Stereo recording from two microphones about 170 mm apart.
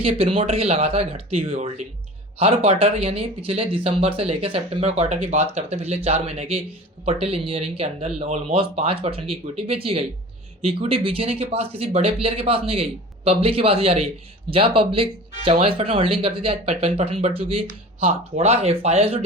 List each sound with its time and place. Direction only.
0.0 s speech: 35° right (ahead or behind)